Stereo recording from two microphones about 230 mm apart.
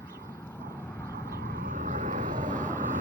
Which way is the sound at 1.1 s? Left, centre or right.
Right.